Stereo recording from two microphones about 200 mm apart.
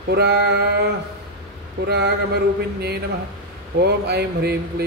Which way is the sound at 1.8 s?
55° right (ahead or behind).